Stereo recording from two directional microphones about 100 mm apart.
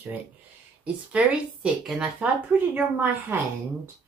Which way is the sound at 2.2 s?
15° right (ahead or behind).